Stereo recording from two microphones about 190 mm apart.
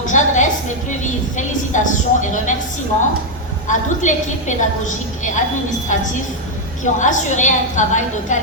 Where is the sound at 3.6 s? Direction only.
40° left (ahead or behind).